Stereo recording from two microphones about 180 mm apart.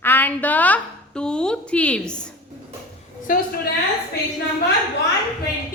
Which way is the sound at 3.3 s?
50° left (ahead or behind).